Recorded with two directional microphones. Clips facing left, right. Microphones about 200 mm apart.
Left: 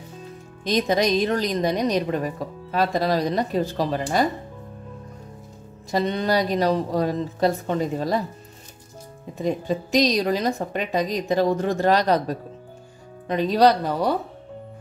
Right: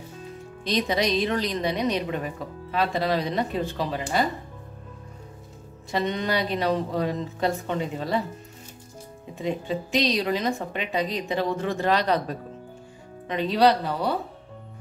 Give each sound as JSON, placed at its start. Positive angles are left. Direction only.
{"t": 0.7, "sound": "a woman's voice", "side_deg": 45}
{"t": 5.9, "sound": "a woman's voice", "side_deg": 40}
{"t": 9.3, "sound": "a woman's voice", "side_deg": 40}